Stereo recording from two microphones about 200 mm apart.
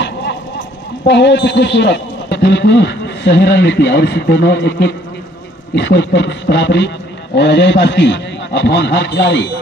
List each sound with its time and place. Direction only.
1.0 s a man's voice: 60° left (ahead or behind)